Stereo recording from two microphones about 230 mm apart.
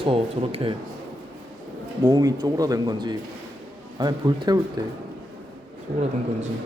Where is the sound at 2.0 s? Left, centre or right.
Centre.